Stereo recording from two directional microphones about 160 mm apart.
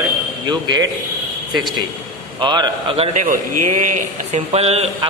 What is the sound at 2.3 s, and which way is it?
A man's voice, 30° right (ahead or behind).